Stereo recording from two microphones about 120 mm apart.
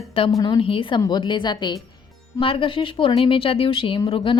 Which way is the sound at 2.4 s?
45° left (ahead or behind).